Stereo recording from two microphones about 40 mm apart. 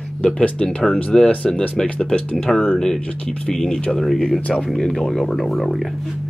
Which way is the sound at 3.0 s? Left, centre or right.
Left.